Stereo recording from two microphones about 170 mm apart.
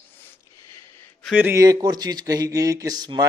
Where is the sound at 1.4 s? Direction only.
15° right (ahead or behind).